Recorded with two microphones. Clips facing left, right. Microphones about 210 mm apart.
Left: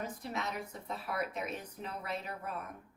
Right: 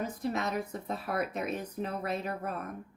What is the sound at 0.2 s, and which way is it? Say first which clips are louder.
Speech: right 7 dB; 45° right (ahead or behind).